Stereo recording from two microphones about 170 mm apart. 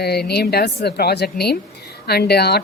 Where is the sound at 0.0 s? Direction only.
70° left (ahead or behind).